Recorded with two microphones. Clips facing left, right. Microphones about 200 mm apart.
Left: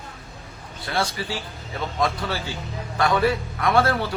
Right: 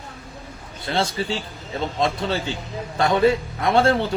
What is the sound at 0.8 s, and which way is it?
A man's voice, 25° right (ahead or behind).